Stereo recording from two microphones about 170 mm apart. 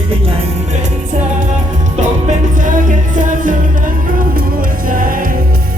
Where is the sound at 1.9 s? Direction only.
50° right (ahead or behind).